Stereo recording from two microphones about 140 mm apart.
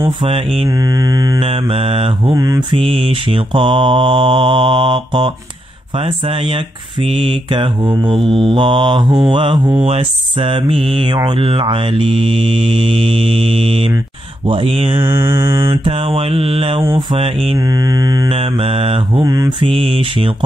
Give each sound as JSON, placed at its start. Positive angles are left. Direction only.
{"t": 0.0, "sound": "speech", "side_deg": -40}
{"t": 0.7, "sound": "mantra", "side_deg": -25}
{"t": 1.7, "sound": "mantra", "side_deg": -45}
{"t": 2.3, "sound": "mantra", "side_deg": -25}
{"t": 2.7, "sound": "speech", "side_deg": -40}
{"t": 15.0, "sound": "mantra", "side_deg": -20}
{"t": 15.6, "sound": "speech", "side_deg": -35}
{"t": 17.6, "sound": "mantra", "side_deg": -25}
{"t": 18.3, "sound": "speech", "side_deg": -45}
{"t": 19.2, "sound": "mantra", "side_deg": -25}
{"t": 19.6, "sound": "speech", "side_deg": -40}